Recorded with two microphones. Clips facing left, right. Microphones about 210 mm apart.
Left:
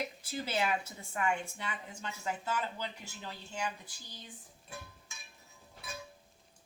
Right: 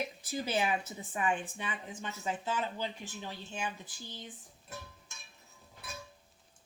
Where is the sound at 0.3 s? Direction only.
15° right (ahead or behind).